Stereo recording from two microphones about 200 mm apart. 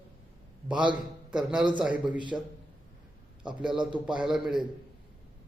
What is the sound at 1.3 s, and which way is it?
Speech, 5° right (ahead or behind).